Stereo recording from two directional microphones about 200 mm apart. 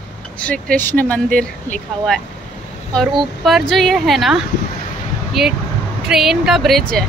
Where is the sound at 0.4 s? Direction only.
5° left (ahead or behind).